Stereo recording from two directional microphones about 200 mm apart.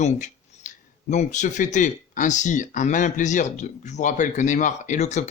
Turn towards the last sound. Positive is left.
turn(degrees=35)  # may be behind; listen again after turning